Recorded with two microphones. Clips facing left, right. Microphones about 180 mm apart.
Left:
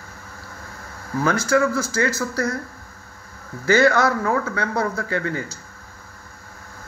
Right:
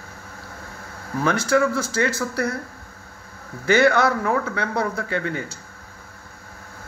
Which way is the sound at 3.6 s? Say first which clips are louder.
Even; 15° right (ahead or behind).